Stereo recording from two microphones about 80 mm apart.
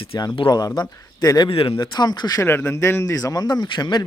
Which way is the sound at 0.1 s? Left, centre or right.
Left.